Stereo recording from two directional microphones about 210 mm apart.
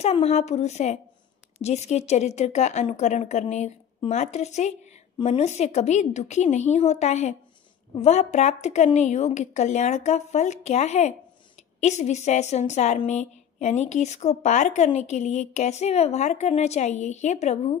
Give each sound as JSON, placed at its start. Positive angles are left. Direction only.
{"t": 0.0, "sound": "a woman's voice", "side_deg": 30}